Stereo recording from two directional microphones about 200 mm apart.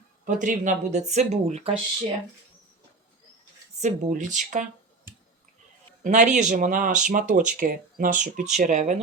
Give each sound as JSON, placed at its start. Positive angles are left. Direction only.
{"t": 0.3, "sound": "speech", "side_deg": -40}
{"t": 3.8, "sound": "speech", "side_deg": -35}
{"t": 6.0, "sound": "a man's voice", "side_deg": -35}